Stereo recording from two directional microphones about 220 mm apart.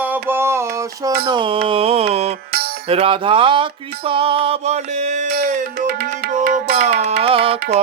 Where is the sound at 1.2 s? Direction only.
25° right (ahead or behind).